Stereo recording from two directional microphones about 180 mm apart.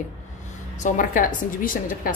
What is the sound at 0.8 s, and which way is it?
A woman's voice, 50° left (ahead or behind).